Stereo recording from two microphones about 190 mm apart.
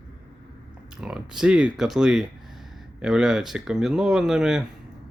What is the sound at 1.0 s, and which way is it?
Speech, 5° right (ahead or behind).